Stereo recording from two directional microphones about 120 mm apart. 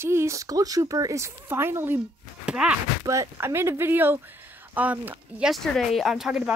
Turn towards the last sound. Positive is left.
turn(degrees=-5)  # may be behind; listen again after turning